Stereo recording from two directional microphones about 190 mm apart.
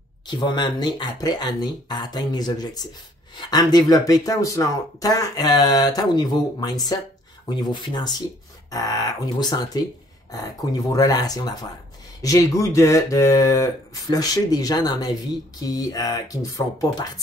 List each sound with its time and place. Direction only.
0.3 s speech: 25° left (ahead or behind)